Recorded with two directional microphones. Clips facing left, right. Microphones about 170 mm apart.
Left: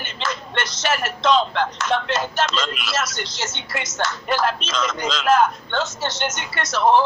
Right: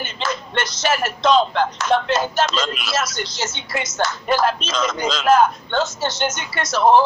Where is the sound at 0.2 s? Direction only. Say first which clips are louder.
Right 2 dB; 40° right (ahead or behind).